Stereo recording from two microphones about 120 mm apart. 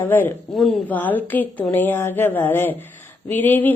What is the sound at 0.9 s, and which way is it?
Speech, 15° left (ahead or behind).